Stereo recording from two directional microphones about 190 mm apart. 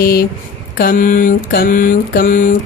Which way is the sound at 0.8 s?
45° left (ahead or behind).